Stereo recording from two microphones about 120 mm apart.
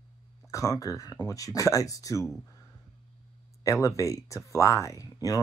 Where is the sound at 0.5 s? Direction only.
25° left (ahead or behind).